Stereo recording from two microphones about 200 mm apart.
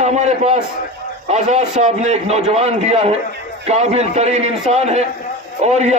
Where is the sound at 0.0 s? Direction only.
35° right (ahead or behind).